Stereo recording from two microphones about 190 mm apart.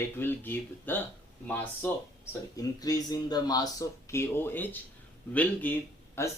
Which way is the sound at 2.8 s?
20° left (ahead or behind).